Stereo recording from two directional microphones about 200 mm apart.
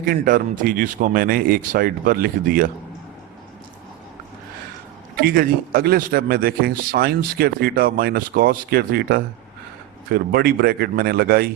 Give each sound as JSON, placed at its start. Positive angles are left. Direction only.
{"t": 0.0, "sound": "speech", "side_deg": -45}
{"t": 5.2, "sound": "speech", "side_deg": -50}